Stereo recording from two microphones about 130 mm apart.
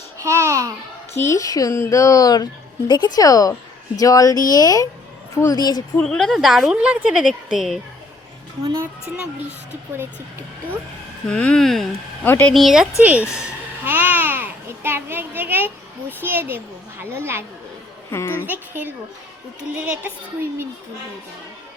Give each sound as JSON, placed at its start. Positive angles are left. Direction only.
{"t": 0.2, "sound": "babbling", "side_deg": -20}
{"t": 1.1, "sound": "a woman's voice", "side_deg": 20}
{"t": 6.0, "sound": "a woman's voice", "side_deg": 5}
{"t": 11.3, "sound": "a woman's voice", "side_deg": 5}
{"t": 12.2, "sound": "speech", "side_deg": 15}
{"t": 12.5, "sound": "a woman's voice", "side_deg": -5}
{"t": 18.1, "sound": "speech", "side_deg": 20}
{"t": 18.4, "sound": "a woman's voice", "side_deg": -15}